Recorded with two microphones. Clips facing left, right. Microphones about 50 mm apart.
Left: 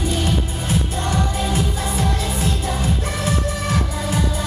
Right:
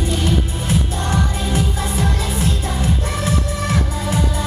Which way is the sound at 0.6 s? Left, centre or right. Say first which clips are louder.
Right 1 dB; right.